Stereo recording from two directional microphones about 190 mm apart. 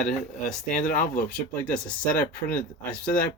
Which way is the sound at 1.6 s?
5° left (ahead or behind).